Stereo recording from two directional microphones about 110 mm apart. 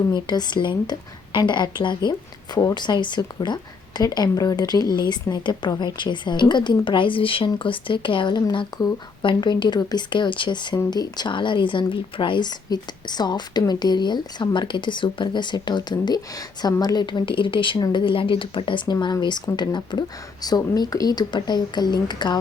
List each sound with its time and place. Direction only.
0.1 s a woman's voice: 40° left (ahead or behind)
18.9 s speech: 40° left (ahead or behind)